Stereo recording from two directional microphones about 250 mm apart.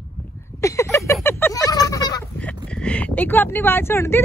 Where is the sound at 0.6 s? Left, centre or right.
Centre.